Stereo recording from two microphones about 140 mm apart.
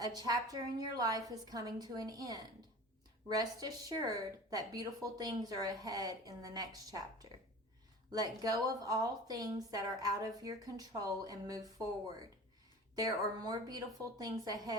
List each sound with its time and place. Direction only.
0.0 s speech: 30° right (ahead or behind)